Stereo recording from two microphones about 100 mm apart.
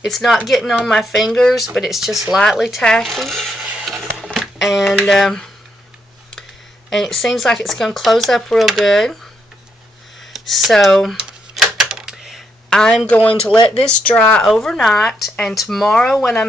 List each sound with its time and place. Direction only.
0.0 s speech: centre (ahead or behind)
4.4 s a sound: centre (ahead or behind)
4.9 s speech: 5° left (ahead or behind)
6.9 s speech: centre (ahead or behind)
10.3 s typewriter: centre (ahead or behind)
13.1 s speech: 15° left (ahead or behind)
13.6 s speech: 60° left (ahead or behind)
13.8 s speech: 15° left (ahead or behind)